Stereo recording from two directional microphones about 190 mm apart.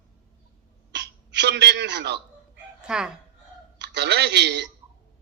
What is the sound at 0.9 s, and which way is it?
A man's voice, 65° right (ahead or behind).